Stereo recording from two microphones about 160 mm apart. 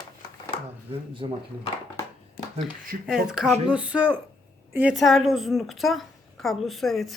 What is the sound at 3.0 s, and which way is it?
A woman's voice, 5° right (ahead or behind).